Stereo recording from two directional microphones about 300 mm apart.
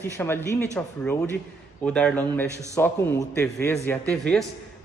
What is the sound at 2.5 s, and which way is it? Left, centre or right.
Speech, centre.